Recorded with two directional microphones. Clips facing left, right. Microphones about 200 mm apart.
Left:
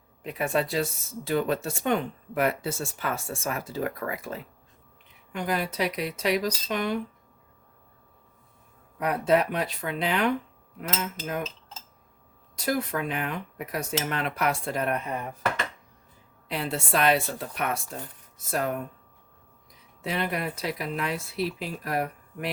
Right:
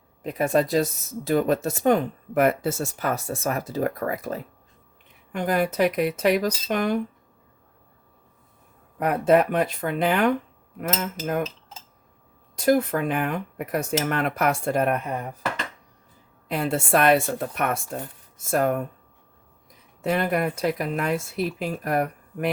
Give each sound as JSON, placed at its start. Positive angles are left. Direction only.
{"t": 0.2, "sound": "speech", "side_deg": -40}
{"t": 9.0, "sound": "speech", "side_deg": -55}
{"t": 12.5, "sound": "speech", "side_deg": -50}
{"t": 16.5, "sound": "speech", "side_deg": -50}
{"t": 20.0, "sound": "speech", "side_deg": -50}